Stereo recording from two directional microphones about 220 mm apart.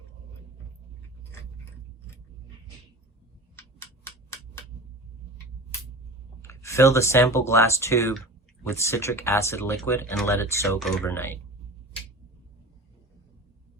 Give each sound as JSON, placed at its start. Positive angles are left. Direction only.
{"t": 3.5, "sound": "hammer", "side_deg": 10}
{"t": 6.4, "sound": "speech", "side_deg": 10}